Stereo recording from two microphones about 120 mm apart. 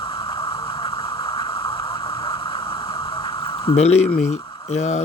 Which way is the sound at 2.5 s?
45° left (ahead or behind).